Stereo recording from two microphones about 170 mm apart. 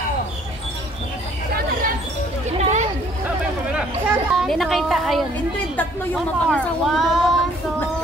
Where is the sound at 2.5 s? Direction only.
40° right (ahead or behind).